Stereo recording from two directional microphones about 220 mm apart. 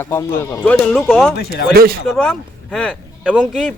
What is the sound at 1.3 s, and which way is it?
Speech, 45° left (ahead or behind).